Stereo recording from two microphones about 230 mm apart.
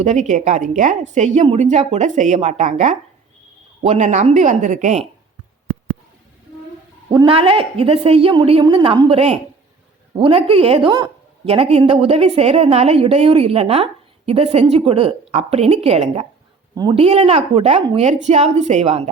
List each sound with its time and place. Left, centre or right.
0.0 s a woman's voice: right
7.1 s a woman's voice: right